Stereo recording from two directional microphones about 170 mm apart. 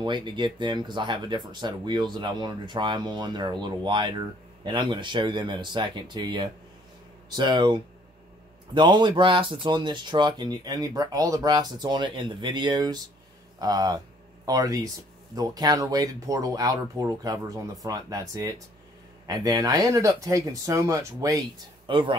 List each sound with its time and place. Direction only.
0.0 s speech: 25° right (ahead or behind)